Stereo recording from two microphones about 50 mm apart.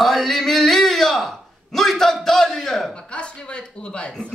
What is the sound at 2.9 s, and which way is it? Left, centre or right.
Speech, left.